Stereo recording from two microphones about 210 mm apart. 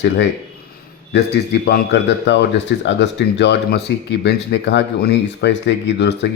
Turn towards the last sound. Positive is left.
turn(degrees=55)  # may be behind; listen again after turning